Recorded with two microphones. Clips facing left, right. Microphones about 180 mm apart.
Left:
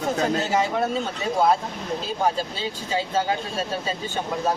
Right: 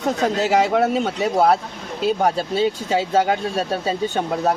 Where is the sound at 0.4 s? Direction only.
75° right (ahead or behind).